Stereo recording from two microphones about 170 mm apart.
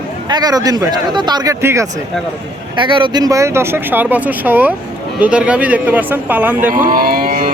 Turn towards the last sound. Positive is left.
turn(degrees=-55)  # may be behind; listen again after turning